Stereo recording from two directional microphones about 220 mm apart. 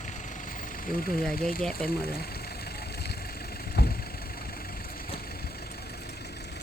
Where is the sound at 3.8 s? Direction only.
45° left (ahead or behind).